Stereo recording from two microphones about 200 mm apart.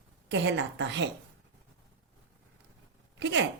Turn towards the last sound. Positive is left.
turn(degrees=-65)  # may be behind; listen again after turning